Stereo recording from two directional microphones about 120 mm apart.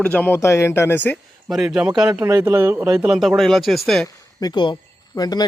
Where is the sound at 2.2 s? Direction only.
30° right (ahead or behind).